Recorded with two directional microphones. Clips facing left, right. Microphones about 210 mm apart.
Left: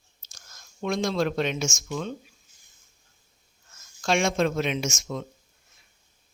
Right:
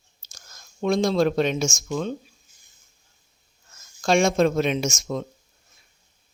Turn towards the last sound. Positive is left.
turn(degrees=-40)  # may be behind; listen again after turning